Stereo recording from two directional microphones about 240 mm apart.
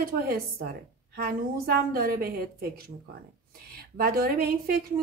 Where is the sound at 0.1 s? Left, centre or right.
Right.